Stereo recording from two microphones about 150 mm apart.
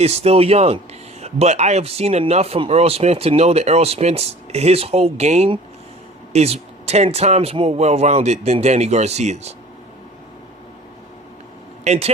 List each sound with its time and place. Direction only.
0.0 s speech: 45° right (ahead or behind)
11.9 s speech: 45° right (ahead or behind)